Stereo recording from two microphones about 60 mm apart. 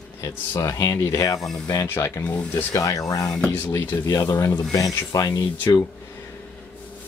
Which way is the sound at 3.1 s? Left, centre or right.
Left.